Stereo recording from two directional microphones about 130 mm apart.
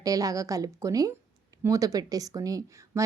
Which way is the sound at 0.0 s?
25° right (ahead or behind).